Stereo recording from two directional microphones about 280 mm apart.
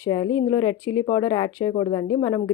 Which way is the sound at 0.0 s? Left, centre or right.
Centre.